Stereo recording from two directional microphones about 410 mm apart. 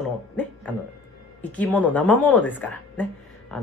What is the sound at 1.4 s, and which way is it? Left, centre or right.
Speech, centre.